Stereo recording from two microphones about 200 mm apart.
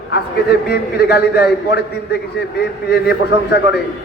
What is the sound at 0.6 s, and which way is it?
A man's voice, 55° left (ahead or behind).